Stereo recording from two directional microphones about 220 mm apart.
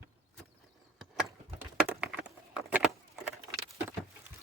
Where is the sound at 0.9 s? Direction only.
5° right (ahead or behind).